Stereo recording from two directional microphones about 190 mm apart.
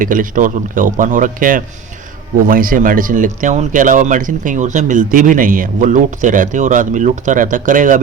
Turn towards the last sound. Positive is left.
turn(degrees=-45)  # may be behind; listen again after turning